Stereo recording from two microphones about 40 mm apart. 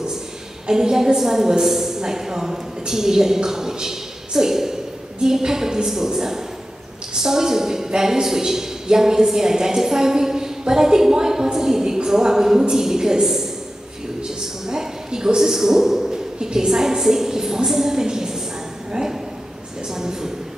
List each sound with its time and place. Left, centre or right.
0.7 s a woman's voice: centre